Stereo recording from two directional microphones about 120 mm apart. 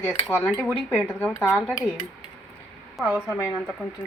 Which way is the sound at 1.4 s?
Centre (ahead or behind).